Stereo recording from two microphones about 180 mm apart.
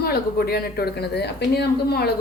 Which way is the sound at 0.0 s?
60° left (ahead or behind).